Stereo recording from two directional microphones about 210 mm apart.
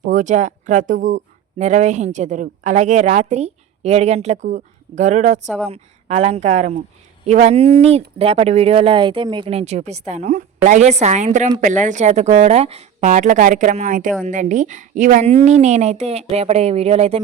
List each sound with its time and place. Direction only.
0.0 s speech: 35° right (ahead or behind)